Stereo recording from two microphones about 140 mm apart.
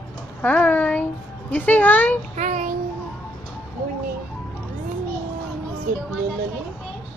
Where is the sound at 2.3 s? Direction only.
60° right (ahead or behind).